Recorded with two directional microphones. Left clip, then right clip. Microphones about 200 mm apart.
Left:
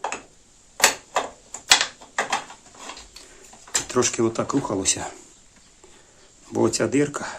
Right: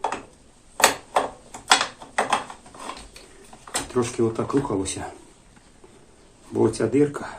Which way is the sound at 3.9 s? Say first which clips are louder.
Left 2 dB; 50° left (ahead or behind).